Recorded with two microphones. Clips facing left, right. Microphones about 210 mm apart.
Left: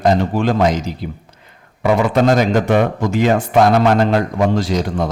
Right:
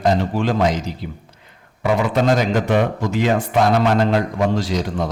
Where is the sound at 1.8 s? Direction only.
50° left (ahead or behind).